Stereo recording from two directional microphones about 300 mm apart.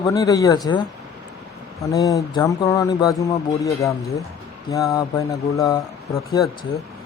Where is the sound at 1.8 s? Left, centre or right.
Centre.